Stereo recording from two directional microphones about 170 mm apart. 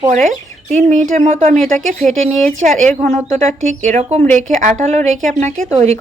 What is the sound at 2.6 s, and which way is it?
Speech, 45° right (ahead or behind).